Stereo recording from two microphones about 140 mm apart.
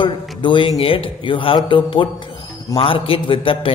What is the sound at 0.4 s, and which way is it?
A man's voice, 35° left (ahead or behind).